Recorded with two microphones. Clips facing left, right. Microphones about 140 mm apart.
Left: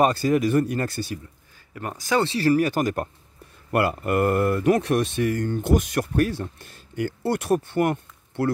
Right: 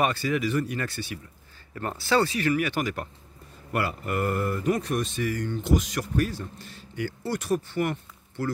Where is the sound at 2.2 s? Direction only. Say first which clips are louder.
Left 5 dB; 30° left (ahead or behind).